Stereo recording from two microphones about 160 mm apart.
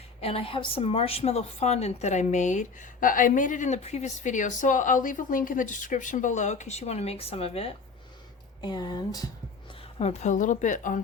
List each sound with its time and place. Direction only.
0.2 s a woman's voice: 40° left (ahead or behind)
8.6 s speech: 25° left (ahead or behind)
10.0 s a woman's voice: 45° left (ahead or behind)